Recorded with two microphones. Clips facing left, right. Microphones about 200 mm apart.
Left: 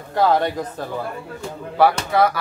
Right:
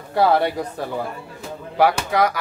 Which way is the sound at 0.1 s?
10° right (ahead or behind).